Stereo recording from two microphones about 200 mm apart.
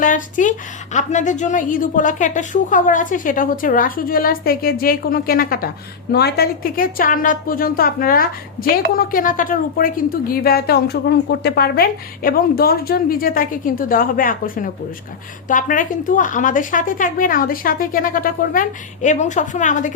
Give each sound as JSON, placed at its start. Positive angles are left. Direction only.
{"t": 0.0, "sound": "a woman's voice", "side_deg": 40}